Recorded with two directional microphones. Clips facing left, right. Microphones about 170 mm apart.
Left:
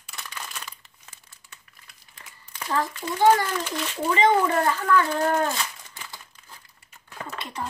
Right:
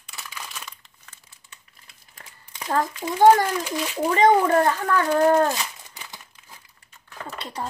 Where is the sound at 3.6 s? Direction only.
10° right (ahead or behind).